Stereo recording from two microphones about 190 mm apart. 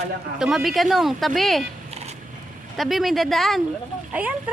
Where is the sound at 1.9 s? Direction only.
35° right (ahead or behind).